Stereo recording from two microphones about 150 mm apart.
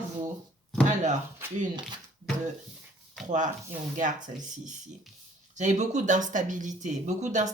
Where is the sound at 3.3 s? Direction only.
55° right (ahead or behind).